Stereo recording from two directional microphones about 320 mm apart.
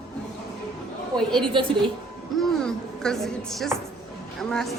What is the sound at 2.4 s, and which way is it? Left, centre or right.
A woman's voice, centre.